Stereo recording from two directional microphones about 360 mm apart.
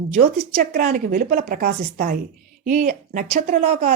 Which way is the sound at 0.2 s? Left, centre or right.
Right.